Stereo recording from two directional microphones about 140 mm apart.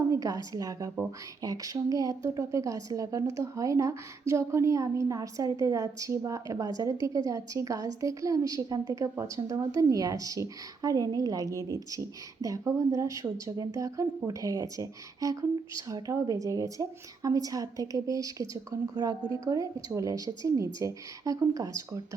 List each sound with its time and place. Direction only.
0.1 s a woman's voice: 25° right (ahead or behind)